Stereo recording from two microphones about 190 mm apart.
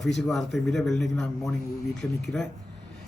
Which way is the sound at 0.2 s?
Centre (ahead or behind).